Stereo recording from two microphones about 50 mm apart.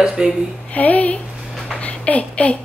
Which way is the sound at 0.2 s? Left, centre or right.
Centre.